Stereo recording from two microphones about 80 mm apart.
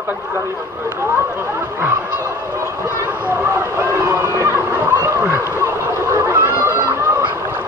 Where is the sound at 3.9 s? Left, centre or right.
Right.